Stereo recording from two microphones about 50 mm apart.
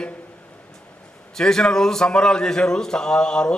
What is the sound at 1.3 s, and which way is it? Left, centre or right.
A man's voice, centre.